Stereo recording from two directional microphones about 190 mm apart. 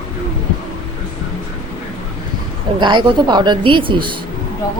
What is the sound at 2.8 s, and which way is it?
A man's voice, 25° right (ahead or behind).